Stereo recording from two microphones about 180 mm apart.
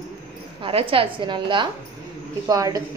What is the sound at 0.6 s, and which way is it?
A woman's voice, 30° right (ahead or behind).